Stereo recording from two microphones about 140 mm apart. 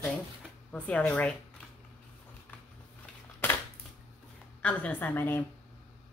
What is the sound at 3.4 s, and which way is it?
Crushing, 15° left (ahead or behind).